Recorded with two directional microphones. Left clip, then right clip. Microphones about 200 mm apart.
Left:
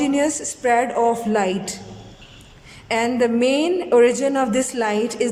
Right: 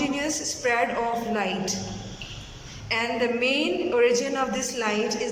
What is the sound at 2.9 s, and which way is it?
A man's voice, 35° left (ahead or behind).